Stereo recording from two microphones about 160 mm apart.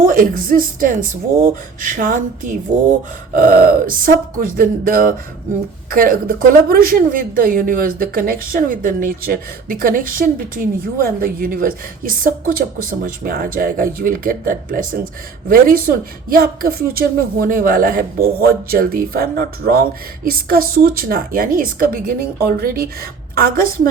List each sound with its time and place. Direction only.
0.0 s a woman's voice: 60° right (ahead or behind)